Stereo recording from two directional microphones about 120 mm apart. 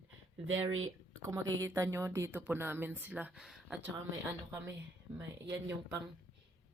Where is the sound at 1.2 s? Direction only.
30° right (ahead or behind); by 3.8 s centre (ahead or behind).